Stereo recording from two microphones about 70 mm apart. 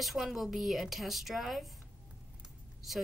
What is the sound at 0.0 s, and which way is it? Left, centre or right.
Speech, centre.